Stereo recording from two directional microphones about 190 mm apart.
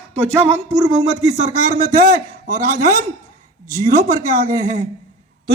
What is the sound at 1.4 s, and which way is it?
Speech, 45° right (ahead or behind).